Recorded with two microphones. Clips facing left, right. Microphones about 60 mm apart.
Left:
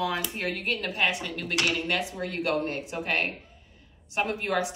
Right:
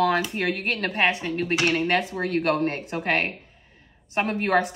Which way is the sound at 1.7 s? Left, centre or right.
Right.